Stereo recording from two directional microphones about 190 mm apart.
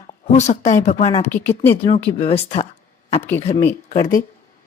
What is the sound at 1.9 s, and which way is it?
Speech, 30° left (ahead or behind).